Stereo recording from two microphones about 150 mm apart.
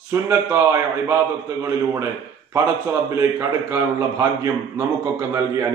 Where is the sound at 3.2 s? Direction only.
20° right (ahead or behind).